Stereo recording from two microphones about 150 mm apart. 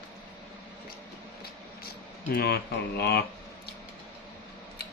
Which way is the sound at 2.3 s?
90° left.